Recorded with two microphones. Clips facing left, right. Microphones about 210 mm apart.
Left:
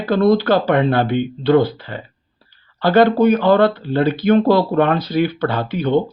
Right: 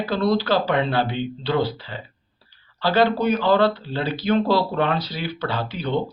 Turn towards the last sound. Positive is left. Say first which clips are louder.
# left 7 dB
turn(degrees=55)  # may be behind; listen again after turning